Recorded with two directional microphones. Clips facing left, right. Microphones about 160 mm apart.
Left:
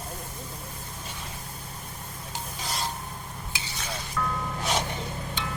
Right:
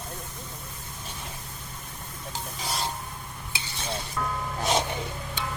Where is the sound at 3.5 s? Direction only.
25° right (ahead or behind).